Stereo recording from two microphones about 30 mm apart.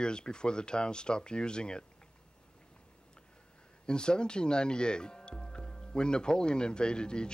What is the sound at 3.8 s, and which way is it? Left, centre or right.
Speech, left.